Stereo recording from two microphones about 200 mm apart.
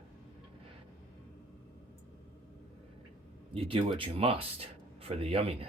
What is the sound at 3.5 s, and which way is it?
Speech, 30° right (ahead or behind).